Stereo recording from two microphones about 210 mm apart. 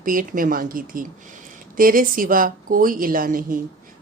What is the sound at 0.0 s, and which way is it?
A woman's voice, 40° right (ahead or behind).